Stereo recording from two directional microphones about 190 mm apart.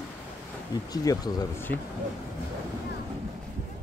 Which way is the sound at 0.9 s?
20° left (ahead or behind).